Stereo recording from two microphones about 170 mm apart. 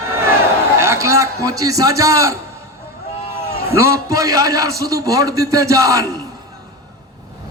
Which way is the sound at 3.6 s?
15° right (ahead or behind).